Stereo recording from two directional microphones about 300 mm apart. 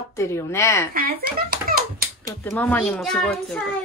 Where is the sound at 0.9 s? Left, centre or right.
Right.